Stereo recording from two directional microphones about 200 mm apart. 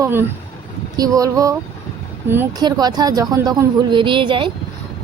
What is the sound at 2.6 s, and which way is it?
A woman's voice, 20° right (ahead or behind).